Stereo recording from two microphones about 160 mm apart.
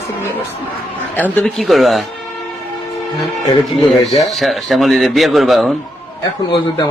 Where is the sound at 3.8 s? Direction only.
Centre (ahead or behind).